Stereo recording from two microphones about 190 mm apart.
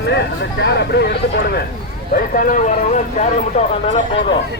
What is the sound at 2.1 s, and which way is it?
Speech, 50° left (ahead or behind).